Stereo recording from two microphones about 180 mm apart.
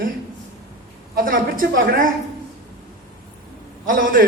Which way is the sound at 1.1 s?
50° right (ahead or behind).